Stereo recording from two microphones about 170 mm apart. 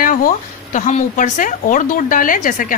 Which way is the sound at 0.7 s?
45° left (ahead or behind).